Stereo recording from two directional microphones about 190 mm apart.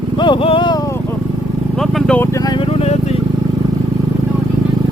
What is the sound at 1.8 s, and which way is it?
Vehicle, centre (ahead or behind).